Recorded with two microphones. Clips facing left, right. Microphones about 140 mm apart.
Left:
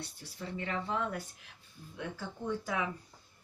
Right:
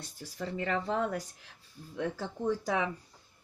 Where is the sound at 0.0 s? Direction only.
40° right (ahead or behind).